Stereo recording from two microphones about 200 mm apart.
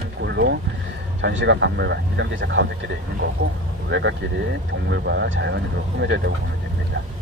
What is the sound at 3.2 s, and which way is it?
Speech, 55° right (ahead or behind).